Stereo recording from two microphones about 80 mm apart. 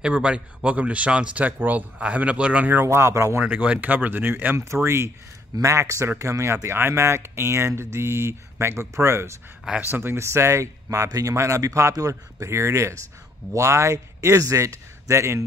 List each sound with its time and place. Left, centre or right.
0.0 s a man's voice: centre; by 3.3 s right
3.3 s speech: right
9.7 s speech: right